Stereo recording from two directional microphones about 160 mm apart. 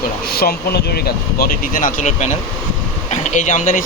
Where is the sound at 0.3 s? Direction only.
75° left (ahead or behind).